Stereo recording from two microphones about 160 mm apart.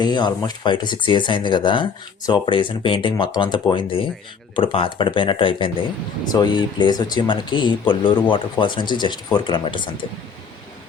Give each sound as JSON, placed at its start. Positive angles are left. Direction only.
{"t": 0.0, "sound": "speech", "side_deg": 25}